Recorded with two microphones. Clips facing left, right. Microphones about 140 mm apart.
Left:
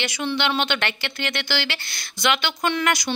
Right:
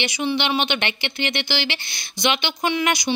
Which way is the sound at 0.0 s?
15° right (ahead or behind).